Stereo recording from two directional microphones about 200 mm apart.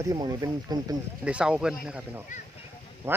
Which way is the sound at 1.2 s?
5° right (ahead or behind).